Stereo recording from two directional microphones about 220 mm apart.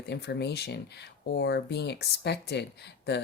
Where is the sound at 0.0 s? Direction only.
50° left (ahead or behind).